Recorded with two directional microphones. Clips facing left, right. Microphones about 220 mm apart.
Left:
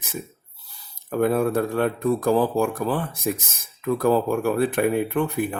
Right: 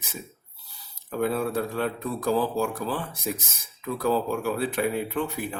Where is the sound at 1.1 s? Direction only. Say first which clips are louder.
Left 5 dB; 50° left (ahead or behind).